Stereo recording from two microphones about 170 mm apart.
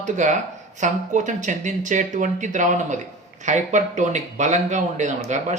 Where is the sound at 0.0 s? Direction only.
45° right (ahead or behind).